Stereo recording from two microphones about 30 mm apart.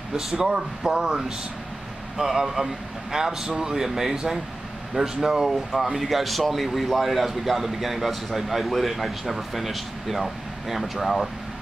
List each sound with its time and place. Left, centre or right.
0.1 s speech: right
3.7 s speech: centre
5.2 s speech: centre
5.5 s speech: centre